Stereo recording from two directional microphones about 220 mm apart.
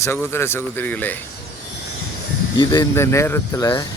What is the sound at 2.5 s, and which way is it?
Speech, 20° left (ahead or behind).